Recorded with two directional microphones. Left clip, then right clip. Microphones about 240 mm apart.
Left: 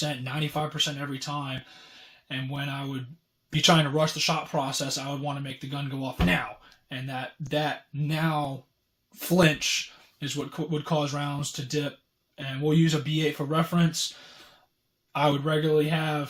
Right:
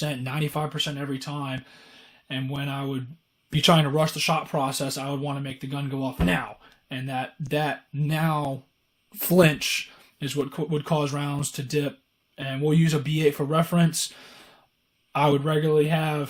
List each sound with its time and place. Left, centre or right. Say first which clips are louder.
0.0 s speech: right 1 dB; right
2.6 s speech: right 3 dB; right